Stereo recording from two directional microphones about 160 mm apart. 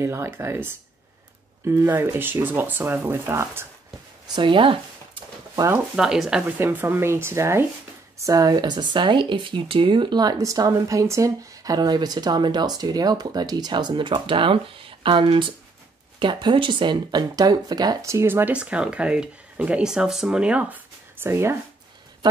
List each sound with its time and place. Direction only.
0.0 s speech: 15° right (ahead or behind)
1.7 s speech: 15° right (ahead or behind)
4.4 s speech: 30° right (ahead or behind)
5.9 s speech: 5° right (ahead or behind)